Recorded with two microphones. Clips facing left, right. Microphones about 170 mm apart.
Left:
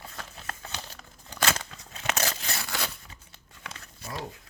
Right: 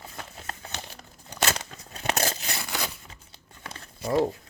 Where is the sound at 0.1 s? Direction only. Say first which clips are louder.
Right 1 dB; 25° right (ahead or behind).